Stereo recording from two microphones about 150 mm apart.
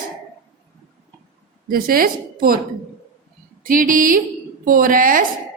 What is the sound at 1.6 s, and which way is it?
Speech, 75° right (ahead or behind).